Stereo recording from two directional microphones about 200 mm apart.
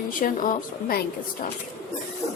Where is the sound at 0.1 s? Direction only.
45° left (ahead or behind).